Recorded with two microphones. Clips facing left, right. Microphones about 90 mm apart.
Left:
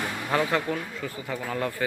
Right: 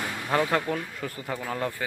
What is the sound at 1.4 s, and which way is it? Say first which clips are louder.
Speech: left 1 dB; 25° right (ahead or behind).